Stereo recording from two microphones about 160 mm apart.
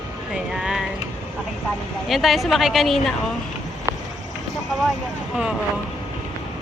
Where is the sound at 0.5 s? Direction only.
5° right (ahead or behind).